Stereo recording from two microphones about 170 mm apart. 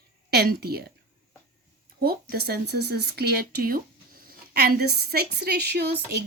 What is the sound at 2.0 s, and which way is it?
Speech, 65° right (ahead or behind).